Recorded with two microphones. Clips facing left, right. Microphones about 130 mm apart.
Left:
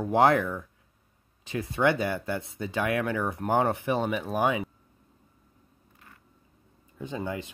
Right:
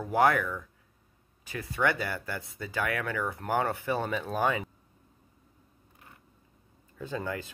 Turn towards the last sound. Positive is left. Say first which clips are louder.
# left 1 dB
turn(degrees=20)  # may be behind; listen again after turning